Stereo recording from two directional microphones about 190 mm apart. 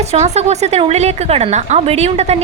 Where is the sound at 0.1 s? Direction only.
35° right (ahead or behind).